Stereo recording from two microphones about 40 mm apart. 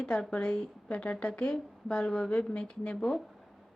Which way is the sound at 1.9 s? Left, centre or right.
Centre.